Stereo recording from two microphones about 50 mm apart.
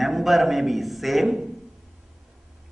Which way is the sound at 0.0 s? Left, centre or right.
Centre.